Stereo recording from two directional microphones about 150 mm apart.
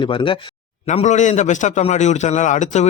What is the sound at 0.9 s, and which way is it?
A man's voice, 50° left (ahead or behind).